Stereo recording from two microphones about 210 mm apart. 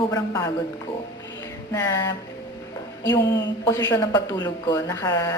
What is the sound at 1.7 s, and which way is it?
Speech, 15° left (ahead or behind).